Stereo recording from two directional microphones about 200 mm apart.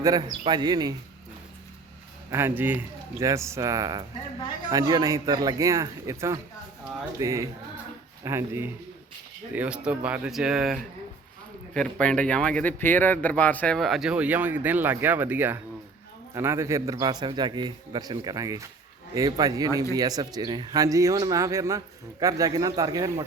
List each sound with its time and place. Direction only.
0.0 s a man's voice: 20° right (ahead or behind)
2.3 s a man's voice: 10° right (ahead or behind)